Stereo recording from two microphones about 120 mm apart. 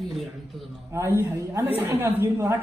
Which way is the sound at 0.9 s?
20° right (ahead or behind).